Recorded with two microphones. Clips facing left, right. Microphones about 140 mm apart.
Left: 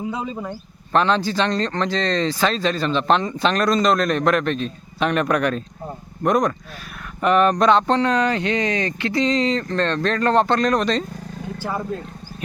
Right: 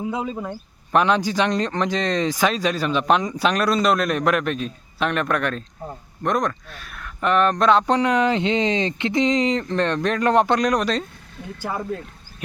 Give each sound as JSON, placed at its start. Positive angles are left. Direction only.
{"t": 0.0, "sound": "speech", "side_deg": -5}